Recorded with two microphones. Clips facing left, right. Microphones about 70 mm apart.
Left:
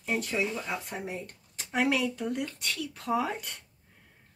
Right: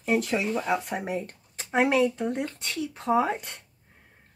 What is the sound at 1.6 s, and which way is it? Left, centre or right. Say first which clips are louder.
Speech: right 5 dB; right.